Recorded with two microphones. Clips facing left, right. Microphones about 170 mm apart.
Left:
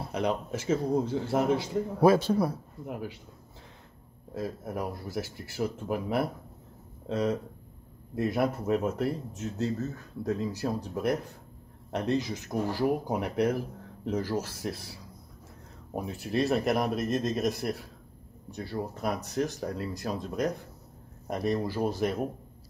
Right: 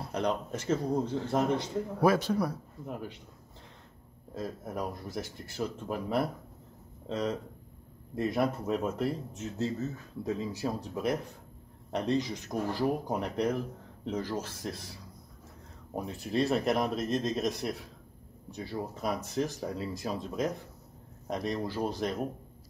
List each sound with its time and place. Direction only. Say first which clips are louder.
0.1 s speech: left 1 dB; 5° left (ahead or behind)
2.0 s speech: left 4 dB; 30° left (ahead or behind)
2.9 s speech: left 2 dB; 5° left (ahead or behind)
4.3 s speech: left 3 dB; 5° left (ahead or behind)